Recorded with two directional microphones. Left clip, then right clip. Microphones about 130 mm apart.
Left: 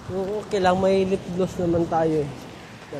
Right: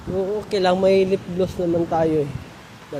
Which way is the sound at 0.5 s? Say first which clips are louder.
Right 3 dB; 55° right (ahead or behind).